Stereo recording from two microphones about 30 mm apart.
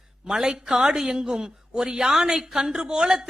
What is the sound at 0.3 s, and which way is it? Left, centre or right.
A man's voice, right.